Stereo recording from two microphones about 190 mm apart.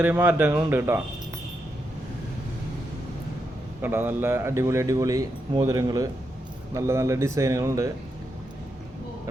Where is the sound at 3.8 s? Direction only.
10° right (ahead or behind).